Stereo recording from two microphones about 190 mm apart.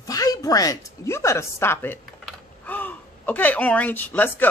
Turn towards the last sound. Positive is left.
turn(degrees=10)  # may be behind; listen again after turning